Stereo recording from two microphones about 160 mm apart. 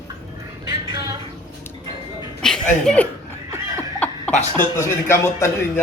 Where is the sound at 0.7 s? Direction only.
25° right (ahead or behind).